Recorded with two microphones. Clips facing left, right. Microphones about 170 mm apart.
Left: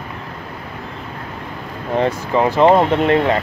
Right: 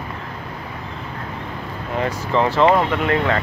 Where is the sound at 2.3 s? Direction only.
15° left (ahead or behind).